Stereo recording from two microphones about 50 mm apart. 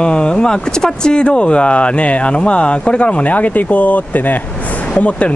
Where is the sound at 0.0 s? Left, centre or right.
Centre.